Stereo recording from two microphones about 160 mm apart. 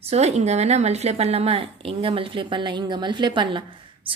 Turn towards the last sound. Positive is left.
turn(degrees=-30)  # may be behind; listen again after turning